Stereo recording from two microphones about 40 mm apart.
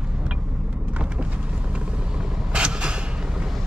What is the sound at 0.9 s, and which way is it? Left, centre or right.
Vehicle, right.